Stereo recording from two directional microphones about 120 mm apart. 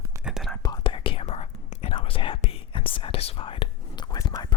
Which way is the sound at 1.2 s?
65° left (ahead or behind).